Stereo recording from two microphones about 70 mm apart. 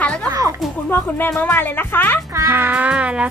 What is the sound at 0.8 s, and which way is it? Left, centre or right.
Speech, left.